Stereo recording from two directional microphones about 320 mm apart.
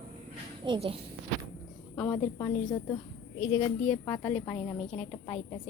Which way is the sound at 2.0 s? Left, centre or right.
Centre.